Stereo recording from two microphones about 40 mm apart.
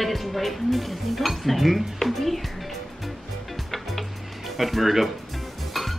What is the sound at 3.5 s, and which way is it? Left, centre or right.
Music, centre.